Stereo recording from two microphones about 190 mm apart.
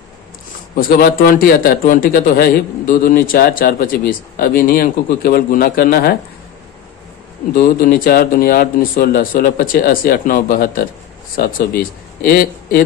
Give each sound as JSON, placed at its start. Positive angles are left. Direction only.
{"t": 0.7, "sound": "speech", "side_deg": 50}
{"t": 7.5, "sound": "speech", "side_deg": 50}